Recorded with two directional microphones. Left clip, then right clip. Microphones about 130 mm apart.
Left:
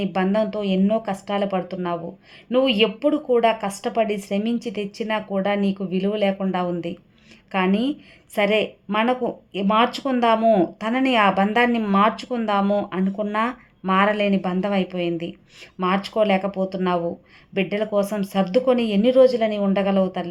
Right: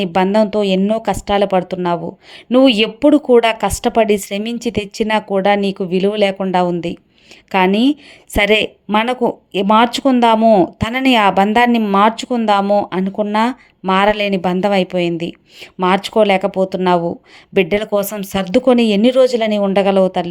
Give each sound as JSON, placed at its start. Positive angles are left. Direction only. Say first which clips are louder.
{"t": 0.0, "sound": "speech", "louder": "right 8 dB", "side_deg": -50}
{"t": 10.4, "sound": "speech", "louder": "right 7 dB", "side_deg": -30}
{"t": 10.8, "sound": "speech", "louder": "right 5 dB", "side_deg": -40}